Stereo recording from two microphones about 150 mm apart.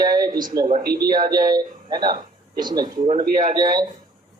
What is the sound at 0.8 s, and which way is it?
Speech, 90° right.